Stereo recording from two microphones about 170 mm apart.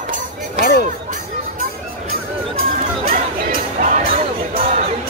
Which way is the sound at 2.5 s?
55° right (ahead or behind).